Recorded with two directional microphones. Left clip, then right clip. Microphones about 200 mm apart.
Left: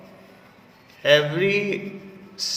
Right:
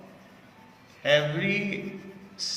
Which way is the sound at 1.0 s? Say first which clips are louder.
Left 6 dB; 50° left (ahead or behind).